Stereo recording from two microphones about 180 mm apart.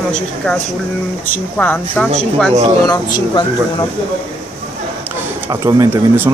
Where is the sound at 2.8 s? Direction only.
20° left (ahead or behind).